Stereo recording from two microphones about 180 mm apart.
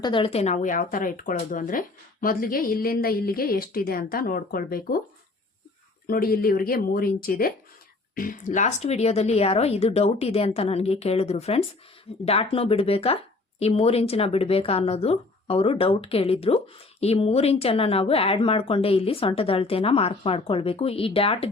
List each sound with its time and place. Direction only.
0.0 s a woman's voice: 30° left (ahead or behind); by 4.9 s 55° left (ahead or behind)
6.1 s a woman's voice: 55° left (ahead or behind); by 21.5 s 30° left (ahead or behind)